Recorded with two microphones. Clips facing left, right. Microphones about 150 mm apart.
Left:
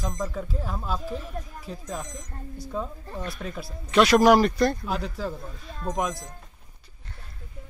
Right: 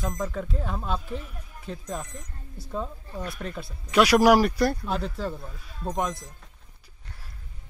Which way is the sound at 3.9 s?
10° right (ahead or behind).